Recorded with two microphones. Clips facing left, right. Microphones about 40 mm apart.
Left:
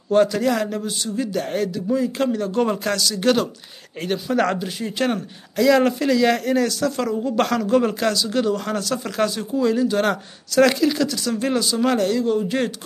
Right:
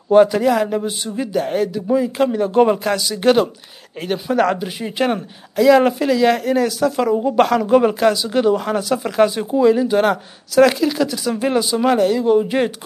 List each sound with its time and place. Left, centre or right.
0.1 s speech: centre